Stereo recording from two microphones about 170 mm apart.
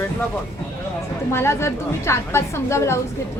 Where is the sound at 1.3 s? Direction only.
15° left (ahead or behind).